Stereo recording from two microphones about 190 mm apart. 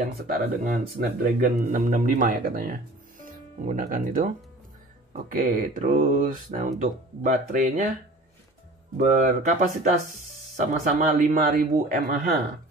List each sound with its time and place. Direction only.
0.1 s speech: 55° right (ahead or behind)
8.9 s speech: 40° right (ahead or behind)